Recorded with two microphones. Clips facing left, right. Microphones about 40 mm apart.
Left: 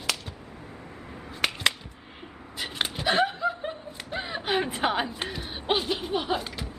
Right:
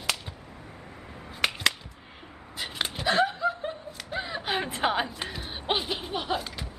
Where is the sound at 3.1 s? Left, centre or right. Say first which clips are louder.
Even; centre.